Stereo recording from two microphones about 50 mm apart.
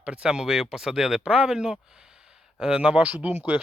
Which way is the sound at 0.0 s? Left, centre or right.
Right.